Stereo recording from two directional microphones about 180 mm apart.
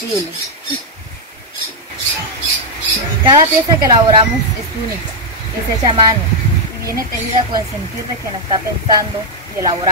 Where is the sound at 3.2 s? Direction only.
25° right (ahead or behind).